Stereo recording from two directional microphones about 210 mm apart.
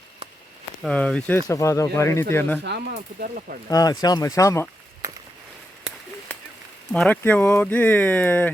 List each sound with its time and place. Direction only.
0.8 s speech: 5° left (ahead or behind)
2.6 s speech: 50° right (ahead or behind)
3.7 s speech: 15° left (ahead or behind)
6.9 s speech: 5° left (ahead or behind)